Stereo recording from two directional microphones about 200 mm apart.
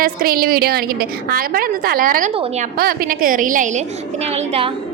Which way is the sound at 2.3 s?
30° right (ahead or behind).